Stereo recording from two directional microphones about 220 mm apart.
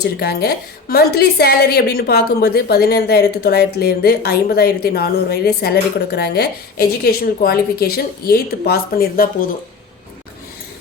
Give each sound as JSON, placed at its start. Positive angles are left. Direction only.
{"t": 0.0, "sound": "a woman's voice", "side_deg": 45}